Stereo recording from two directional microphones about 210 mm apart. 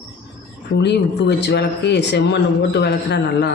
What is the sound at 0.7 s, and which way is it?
Speech, 55° left (ahead or behind).